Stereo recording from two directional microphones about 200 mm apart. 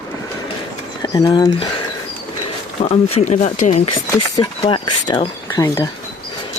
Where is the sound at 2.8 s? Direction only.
30° left (ahead or behind).